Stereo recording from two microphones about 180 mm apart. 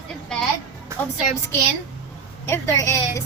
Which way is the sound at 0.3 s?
5° left (ahead or behind).